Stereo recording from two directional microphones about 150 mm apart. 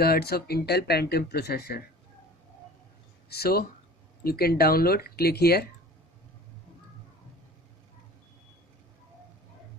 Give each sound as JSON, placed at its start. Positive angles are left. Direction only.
{"t": 0.0, "sound": "speech", "side_deg": 90}
{"t": 3.3, "sound": "speech", "side_deg": 90}